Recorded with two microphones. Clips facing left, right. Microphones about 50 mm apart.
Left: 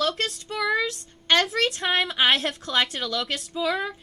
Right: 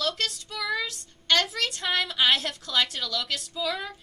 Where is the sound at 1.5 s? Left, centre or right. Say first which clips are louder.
Left 4 dB; left.